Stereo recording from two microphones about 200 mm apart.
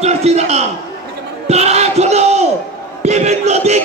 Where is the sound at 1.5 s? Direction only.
35° right (ahead or behind).